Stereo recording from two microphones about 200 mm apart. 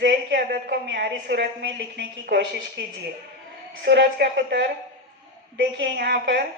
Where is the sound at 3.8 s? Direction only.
55° right (ahead or behind).